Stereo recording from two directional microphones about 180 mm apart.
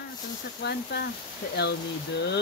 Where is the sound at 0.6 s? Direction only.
65° left (ahead or behind).